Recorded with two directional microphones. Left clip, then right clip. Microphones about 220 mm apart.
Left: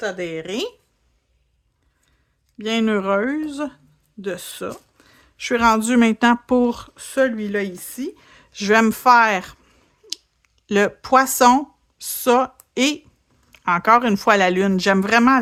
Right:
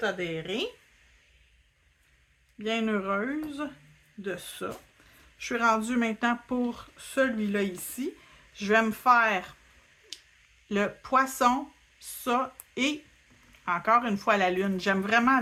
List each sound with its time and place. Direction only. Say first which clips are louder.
0.0 s speech: left 5 dB; 45° left (ahead or behind)
2.6 s speech: left 8 dB; 50° left (ahead or behind)
10.7 s speech: left 11 dB; 45° left (ahead or behind)